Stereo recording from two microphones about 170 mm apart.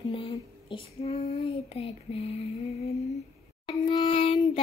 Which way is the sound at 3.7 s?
25° left (ahead or behind).